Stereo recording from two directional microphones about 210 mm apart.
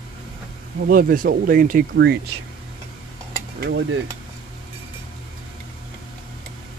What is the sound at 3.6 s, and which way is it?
Speech, 60° right (ahead or behind).